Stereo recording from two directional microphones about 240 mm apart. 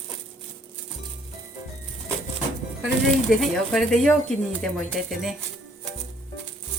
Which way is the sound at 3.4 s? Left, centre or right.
Centre.